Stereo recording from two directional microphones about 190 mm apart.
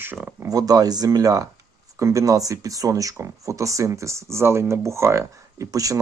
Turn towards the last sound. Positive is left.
turn(degrees=-15)  # may be behind; listen again after turning